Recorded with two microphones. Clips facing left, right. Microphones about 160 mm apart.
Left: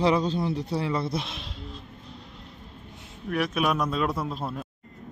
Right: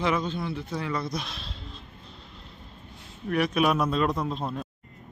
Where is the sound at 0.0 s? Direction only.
35° left (ahead or behind).